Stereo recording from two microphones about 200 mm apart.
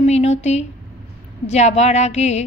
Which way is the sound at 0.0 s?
35° left (ahead or behind).